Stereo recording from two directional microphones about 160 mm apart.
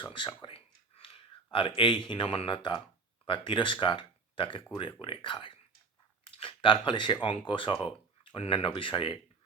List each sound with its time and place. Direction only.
0.0 s speech: 30° left (ahead or behind)